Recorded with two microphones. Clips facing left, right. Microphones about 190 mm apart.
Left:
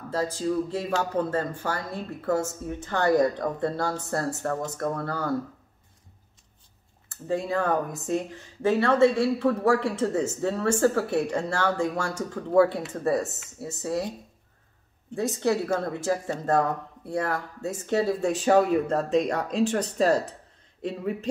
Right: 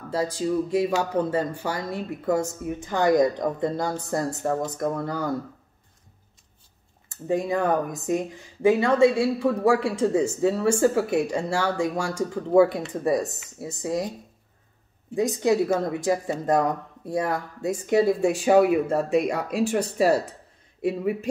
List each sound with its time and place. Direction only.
0.1 s speech: 15° right (ahead or behind)
7.1 s speech: 15° right (ahead or behind)
15.0 s speech: 15° right (ahead or behind)